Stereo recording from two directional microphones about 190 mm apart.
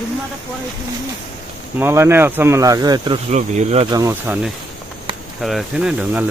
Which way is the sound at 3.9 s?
15° right (ahead or behind).